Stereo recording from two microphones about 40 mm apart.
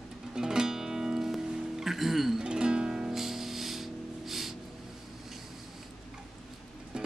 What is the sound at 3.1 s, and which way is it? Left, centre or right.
Music, centre.